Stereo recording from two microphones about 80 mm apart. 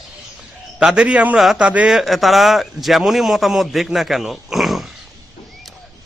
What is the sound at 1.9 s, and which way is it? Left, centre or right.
A man's voice, centre.